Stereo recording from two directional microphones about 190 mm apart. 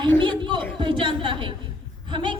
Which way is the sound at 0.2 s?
25° right (ahead or behind).